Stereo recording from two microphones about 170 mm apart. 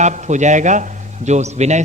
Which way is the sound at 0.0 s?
45° right (ahead or behind).